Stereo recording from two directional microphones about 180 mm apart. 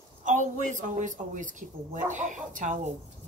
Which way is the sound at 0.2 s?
45° right (ahead or behind).